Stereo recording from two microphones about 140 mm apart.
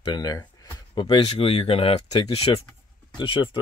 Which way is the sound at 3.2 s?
35° left (ahead or behind).